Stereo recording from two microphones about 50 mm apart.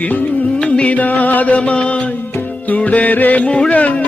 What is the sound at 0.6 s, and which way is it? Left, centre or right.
Music, left.